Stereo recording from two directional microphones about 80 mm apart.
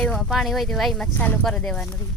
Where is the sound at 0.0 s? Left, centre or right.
Centre.